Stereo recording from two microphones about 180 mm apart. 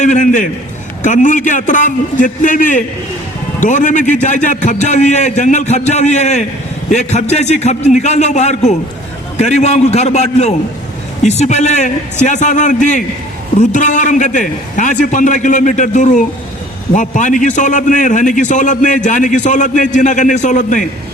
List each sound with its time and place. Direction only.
0.0 s a man's voice: 45° left (ahead or behind)